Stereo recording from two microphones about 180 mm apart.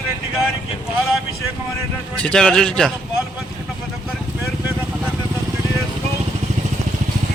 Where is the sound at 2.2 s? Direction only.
5° left (ahead or behind).